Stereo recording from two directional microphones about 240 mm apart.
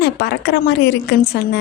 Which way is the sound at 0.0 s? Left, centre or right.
Left.